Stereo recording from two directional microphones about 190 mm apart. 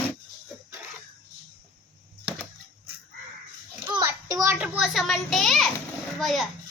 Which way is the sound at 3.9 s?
20° right (ahead or behind).